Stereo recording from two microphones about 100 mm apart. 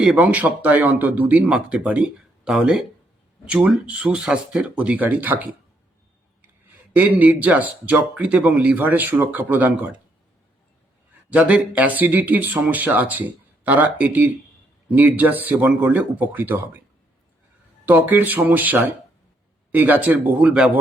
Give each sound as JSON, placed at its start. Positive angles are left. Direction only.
{"t": 0.0, "sound": "speech", "side_deg": -10}
{"t": 6.9, "sound": "speech", "side_deg": -15}
{"t": 11.3, "sound": "speech", "side_deg": -15}
{"t": 17.8, "sound": "speech", "side_deg": -20}